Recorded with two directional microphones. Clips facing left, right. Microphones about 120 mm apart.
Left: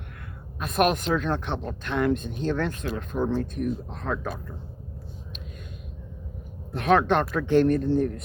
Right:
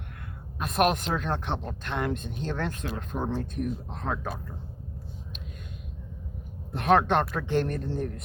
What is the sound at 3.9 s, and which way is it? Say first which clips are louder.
Speech: left 2 dB; 20° right (ahead or behind).